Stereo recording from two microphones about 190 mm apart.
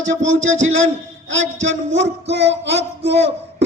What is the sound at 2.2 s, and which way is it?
Speech, 65° right (ahead or behind).